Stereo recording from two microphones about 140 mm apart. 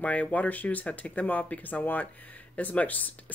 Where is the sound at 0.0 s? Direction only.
10° left (ahead or behind).